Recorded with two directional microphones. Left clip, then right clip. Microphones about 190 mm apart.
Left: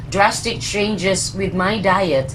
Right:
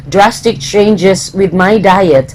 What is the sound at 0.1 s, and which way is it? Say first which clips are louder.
Speech: right 8 dB; 45° right (ahead or behind).